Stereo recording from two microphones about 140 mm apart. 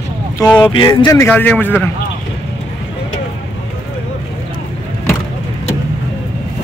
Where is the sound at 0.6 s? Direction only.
35° left (ahead or behind).